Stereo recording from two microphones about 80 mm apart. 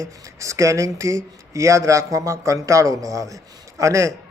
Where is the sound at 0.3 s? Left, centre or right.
Right.